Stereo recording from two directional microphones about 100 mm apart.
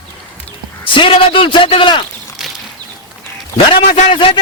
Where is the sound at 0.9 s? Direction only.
60° left (ahead or behind).